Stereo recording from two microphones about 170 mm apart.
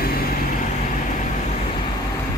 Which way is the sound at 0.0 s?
60° left (ahead or behind).